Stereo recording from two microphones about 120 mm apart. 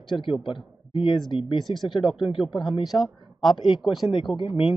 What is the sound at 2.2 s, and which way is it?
Speech, 45° left (ahead or behind).